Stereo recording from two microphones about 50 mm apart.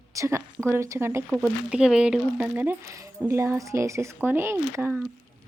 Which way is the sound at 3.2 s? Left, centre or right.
Right.